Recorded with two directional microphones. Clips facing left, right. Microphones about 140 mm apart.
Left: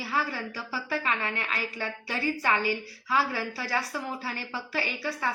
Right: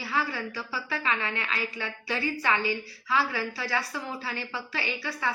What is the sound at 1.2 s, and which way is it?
A woman's voice, 40° left (ahead or behind).